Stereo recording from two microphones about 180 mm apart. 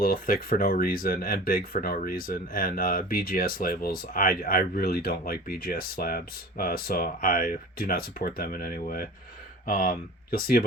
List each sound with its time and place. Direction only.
0.0 s speech: 50° left (ahead or behind)